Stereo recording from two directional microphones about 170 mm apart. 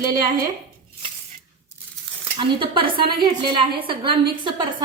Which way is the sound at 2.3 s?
30° right (ahead or behind).